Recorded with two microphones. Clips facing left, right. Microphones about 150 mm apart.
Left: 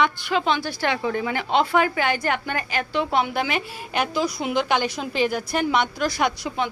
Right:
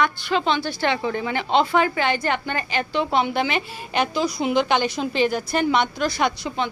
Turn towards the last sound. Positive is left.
turn(degrees=10)  # may be behind; listen again after turning